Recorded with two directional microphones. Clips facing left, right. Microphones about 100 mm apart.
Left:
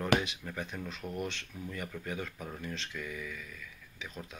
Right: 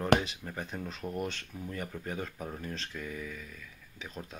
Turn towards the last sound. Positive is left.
turn(degrees=-40)  # may be behind; listen again after turning